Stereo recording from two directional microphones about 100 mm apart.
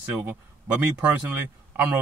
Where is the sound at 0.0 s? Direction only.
20° right (ahead or behind).